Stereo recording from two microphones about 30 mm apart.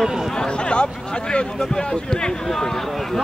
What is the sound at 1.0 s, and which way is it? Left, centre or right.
Speech, left.